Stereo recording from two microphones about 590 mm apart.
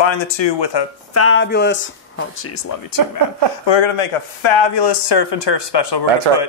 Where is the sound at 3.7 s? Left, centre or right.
Left.